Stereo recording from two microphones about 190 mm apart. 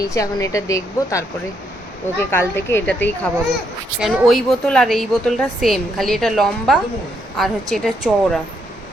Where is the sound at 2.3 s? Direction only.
15° left (ahead or behind).